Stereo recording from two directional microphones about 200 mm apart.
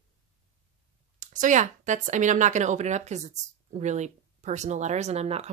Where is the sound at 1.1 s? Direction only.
40° right (ahead or behind).